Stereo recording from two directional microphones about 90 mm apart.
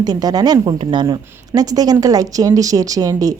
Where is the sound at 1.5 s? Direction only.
45° right (ahead or behind).